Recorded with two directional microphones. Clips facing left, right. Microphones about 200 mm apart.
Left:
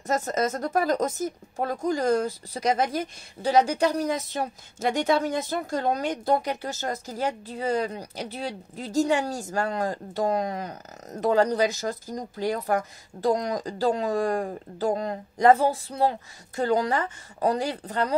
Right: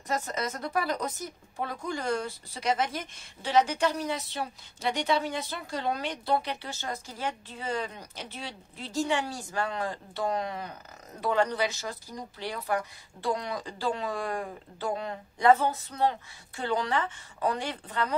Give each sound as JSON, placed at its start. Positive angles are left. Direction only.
{"t": 0.0, "sound": "speech", "side_deg": 45}